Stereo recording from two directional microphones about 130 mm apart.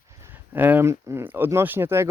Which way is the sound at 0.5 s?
15° right (ahead or behind).